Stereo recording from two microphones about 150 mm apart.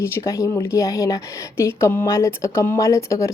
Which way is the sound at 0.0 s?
20° left (ahead or behind).